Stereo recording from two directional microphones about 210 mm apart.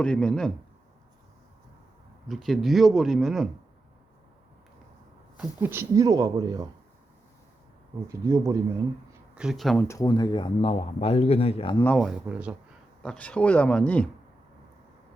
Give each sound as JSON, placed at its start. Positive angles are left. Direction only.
{"t": 0.0, "sound": "speech", "side_deg": 5}
{"t": 2.2, "sound": "speech", "side_deg": 0}
{"t": 5.4, "sound": "speech", "side_deg": -10}
{"t": 8.0, "sound": "speech", "side_deg": -15}
{"t": 9.3, "sound": "speech", "side_deg": -5}
{"t": 9.8, "sound": "a man's voice", "side_deg": 15}
{"t": 11.8, "sound": "speech", "side_deg": 5}